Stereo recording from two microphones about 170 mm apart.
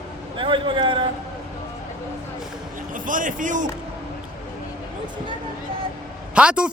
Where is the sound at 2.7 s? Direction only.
50° right (ahead or behind).